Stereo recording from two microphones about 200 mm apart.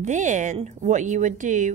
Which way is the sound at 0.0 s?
40° right (ahead or behind).